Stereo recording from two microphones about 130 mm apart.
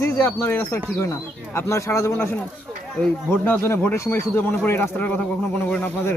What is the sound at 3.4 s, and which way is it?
Speech, 15° left (ahead or behind).